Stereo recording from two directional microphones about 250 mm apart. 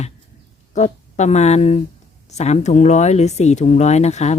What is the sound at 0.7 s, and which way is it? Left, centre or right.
Speech, left.